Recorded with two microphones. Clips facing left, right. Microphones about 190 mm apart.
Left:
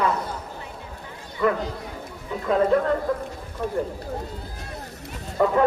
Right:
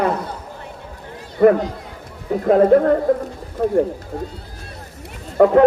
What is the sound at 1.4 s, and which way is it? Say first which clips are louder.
Speech: right 10 dB; 55° right (ahead or behind).